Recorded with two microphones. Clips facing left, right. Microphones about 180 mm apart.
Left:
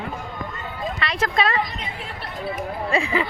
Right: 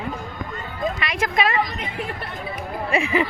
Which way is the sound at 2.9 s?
20° right (ahead or behind).